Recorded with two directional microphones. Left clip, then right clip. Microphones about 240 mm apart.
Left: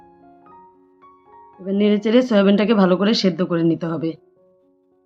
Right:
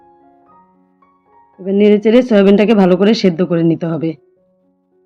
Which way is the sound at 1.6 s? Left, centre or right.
Centre.